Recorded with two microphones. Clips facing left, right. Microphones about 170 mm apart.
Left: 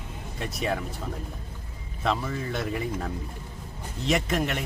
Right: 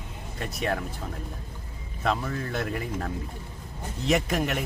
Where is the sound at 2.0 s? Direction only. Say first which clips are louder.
Even; centre (ahead or behind).